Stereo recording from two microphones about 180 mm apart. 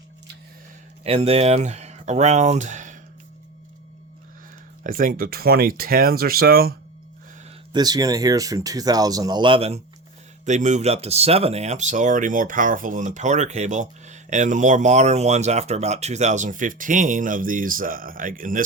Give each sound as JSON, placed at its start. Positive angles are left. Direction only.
{"t": 1.0, "sound": "speech", "side_deg": -35}
{"t": 4.8, "sound": "speech", "side_deg": -50}
{"t": 7.7, "sound": "speech", "side_deg": -20}